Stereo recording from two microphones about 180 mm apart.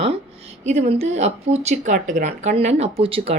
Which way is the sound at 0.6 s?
40° right (ahead or behind).